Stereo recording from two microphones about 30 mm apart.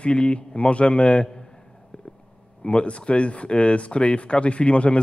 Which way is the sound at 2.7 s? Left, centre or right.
Left.